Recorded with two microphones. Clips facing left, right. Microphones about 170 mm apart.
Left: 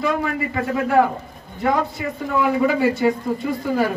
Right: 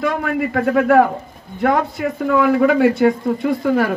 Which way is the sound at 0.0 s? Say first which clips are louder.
Right 2 dB; 60° right (ahead or behind).